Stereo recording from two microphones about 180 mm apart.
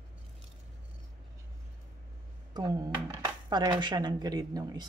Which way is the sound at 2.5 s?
20° right (ahead or behind).